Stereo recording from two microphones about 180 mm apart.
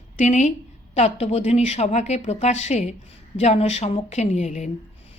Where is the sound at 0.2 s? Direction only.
40° left (ahead or behind).